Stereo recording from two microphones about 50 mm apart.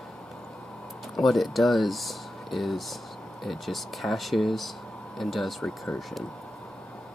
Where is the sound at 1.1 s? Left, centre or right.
Centre.